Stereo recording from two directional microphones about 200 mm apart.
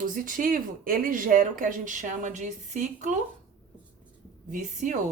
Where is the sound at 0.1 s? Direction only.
45° right (ahead or behind).